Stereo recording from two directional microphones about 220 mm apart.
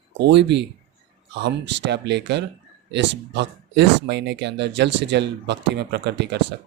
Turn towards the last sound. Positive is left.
turn(degrees=-50)  # may be behind; listen again after turning